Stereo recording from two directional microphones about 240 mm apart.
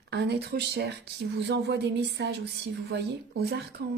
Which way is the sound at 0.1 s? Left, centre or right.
Right.